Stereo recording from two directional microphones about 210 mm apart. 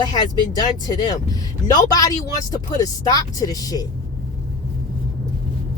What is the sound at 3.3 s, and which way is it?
Speech, 15° left (ahead or behind).